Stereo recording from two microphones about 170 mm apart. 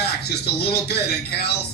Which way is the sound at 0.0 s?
70° left (ahead or behind).